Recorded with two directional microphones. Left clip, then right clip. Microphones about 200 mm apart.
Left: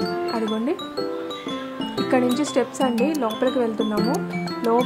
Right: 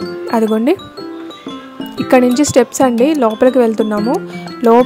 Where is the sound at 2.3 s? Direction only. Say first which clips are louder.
Right 11 dB; 40° right (ahead or behind).